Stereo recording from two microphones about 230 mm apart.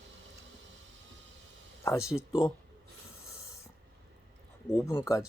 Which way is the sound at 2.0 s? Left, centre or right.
Centre.